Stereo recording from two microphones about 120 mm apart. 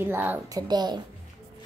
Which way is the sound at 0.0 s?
15° right (ahead or behind).